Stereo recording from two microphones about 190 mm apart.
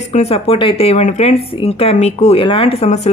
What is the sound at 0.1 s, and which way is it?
Speech, 35° left (ahead or behind).